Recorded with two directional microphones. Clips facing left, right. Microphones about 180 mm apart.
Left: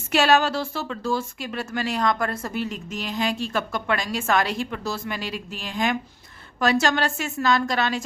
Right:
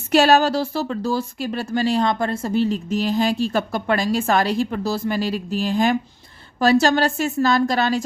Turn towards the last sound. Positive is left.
turn(degrees=-35)  # may be behind; listen again after turning